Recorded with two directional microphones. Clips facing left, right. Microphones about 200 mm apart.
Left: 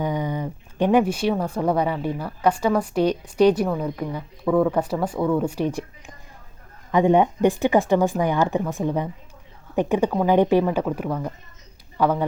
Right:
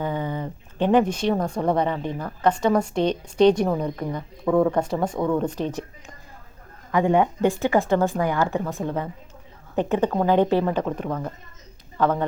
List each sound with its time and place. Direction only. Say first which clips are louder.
0.0 s speech: left 2 dB; 15° left (ahead or behind)
6.9 s speech: left 2 dB; 20° left (ahead or behind)